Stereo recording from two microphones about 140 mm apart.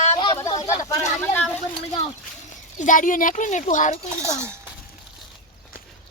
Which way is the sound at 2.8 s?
70° left (ahead or behind).